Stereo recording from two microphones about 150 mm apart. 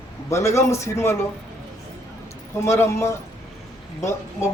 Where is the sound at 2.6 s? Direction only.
20° left (ahead or behind).